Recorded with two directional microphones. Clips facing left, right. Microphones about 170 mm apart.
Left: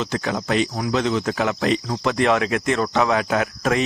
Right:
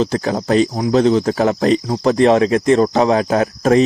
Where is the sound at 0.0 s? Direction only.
35° right (ahead or behind).